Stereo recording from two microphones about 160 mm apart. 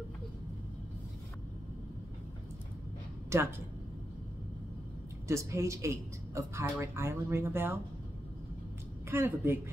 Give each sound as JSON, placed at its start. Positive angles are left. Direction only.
{"t": 3.3, "sound": "speech", "side_deg": -15}
{"t": 5.3, "sound": "speech", "side_deg": -20}
{"t": 9.1, "sound": "speech", "side_deg": -15}